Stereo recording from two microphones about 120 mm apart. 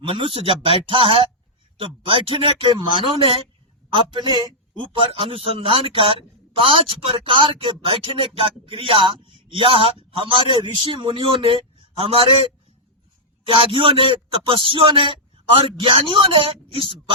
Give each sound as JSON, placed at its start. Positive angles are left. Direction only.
{"t": 0.2, "sound": "a man's voice", "side_deg": -45}
{"t": 4.9, "sound": "a man's voice", "side_deg": -50}
{"t": 13.6, "sound": "a man's voice", "side_deg": -45}